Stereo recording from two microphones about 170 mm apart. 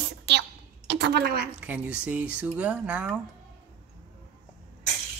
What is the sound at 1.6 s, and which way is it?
Speech, 10° right (ahead or behind).